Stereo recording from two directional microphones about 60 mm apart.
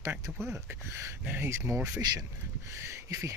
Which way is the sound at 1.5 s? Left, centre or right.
Right.